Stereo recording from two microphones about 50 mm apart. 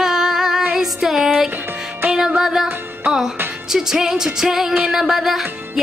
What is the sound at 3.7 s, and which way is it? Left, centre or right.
Music, centre.